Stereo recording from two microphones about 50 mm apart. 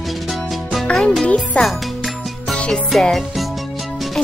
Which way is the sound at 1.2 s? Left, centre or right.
Centre.